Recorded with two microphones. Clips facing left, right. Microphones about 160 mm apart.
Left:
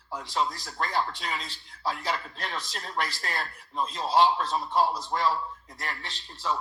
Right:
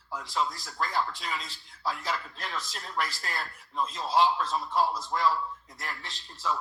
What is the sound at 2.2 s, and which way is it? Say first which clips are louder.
Speech: left 1 dB; 35° left (ahead or behind).